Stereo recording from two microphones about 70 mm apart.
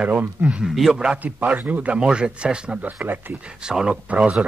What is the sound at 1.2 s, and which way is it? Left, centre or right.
Speech, right.